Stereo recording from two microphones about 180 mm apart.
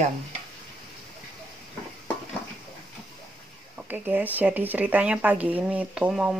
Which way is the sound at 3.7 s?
10° right (ahead or behind).